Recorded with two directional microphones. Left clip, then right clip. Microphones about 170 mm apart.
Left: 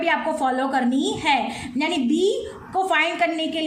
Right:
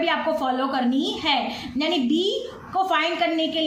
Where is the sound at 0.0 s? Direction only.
30° left (ahead or behind).